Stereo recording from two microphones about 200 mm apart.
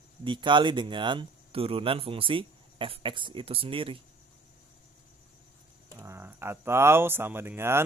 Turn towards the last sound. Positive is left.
turn(degrees=-10)  # may be behind; listen again after turning